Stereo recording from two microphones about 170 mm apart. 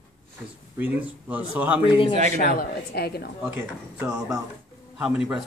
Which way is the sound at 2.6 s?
70° left (ahead or behind).